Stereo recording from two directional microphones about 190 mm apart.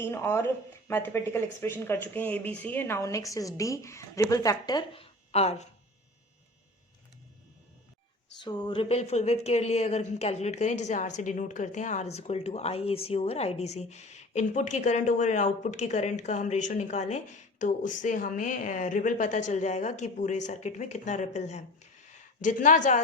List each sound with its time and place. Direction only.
0.0 s speech: 10° left (ahead or behind)
5.3 s speech: 35° left (ahead or behind)
8.4 s speech: 25° left (ahead or behind); by 23.0 s 40° left (ahead or behind)